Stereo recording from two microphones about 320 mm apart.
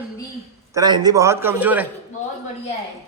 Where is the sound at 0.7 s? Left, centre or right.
Centre.